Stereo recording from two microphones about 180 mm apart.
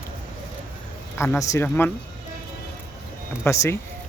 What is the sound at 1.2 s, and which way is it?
Speech, 15° left (ahead or behind).